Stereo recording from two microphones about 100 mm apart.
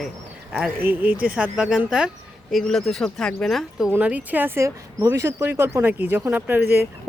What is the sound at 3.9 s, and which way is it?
Speech, 15° right (ahead or behind).